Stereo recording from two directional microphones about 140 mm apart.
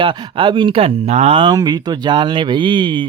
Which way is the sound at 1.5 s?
25° right (ahead or behind).